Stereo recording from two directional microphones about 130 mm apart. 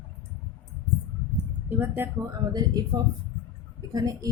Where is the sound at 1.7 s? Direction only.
15° right (ahead or behind).